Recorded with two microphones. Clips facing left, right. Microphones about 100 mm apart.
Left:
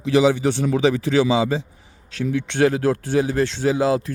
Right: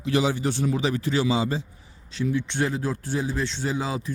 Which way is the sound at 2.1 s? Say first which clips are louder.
Left 5 dB; 60° left (ahead or behind).